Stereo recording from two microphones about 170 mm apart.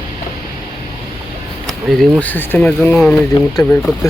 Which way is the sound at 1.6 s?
Centre (ahead or behind).